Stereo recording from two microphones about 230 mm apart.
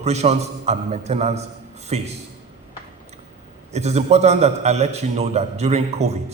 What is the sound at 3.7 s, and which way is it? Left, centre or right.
A man's voice, right.